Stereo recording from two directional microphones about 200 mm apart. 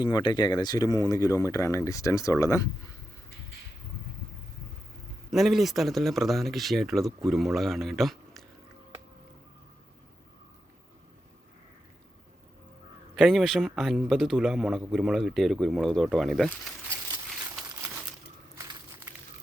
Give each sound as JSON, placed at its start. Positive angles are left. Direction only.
{"t": 0.0, "sound": "speech", "side_deg": 20}
{"t": 5.3, "sound": "a man's voice", "side_deg": 0}
{"t": 13.1, "sound": "a man's voice", "side_deg": 0}